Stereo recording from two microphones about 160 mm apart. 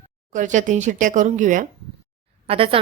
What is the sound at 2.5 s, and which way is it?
Speech, 35° right (ahead or behind).